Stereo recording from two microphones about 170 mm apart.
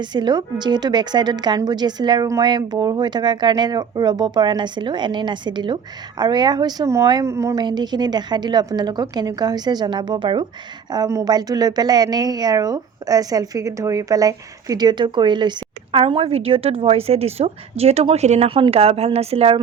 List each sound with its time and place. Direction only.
0.0 s a woman's voice: 25° right (ahead or behind)